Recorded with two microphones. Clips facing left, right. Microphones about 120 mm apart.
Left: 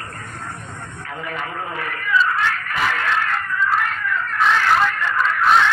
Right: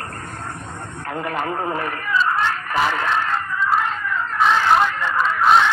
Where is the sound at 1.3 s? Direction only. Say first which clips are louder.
Right 5 dB; 50° right (ahead or behind).